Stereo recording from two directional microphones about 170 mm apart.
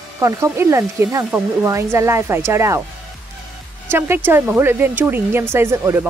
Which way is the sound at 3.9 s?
15° right (ahead or behind).